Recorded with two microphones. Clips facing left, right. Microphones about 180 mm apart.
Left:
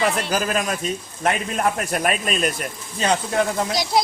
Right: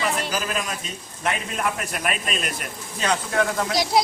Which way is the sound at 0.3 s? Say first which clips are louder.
Left 5 dB; 45° left (ahead or behind).